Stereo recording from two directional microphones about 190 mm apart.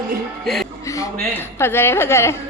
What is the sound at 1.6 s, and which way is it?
Speech, 10° left (ahead or behind).